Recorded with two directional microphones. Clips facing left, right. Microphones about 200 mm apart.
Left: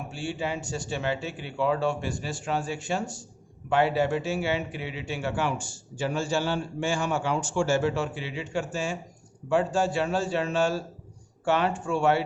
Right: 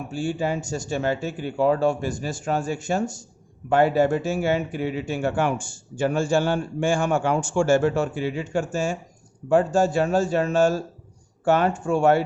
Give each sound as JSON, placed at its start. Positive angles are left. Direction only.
{"t": 0.1, "sound": "a man's voice", "side_deg": -45}